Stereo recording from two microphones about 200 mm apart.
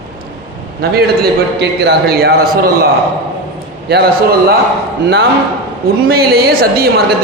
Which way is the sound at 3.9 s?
55° right (ahead or behind).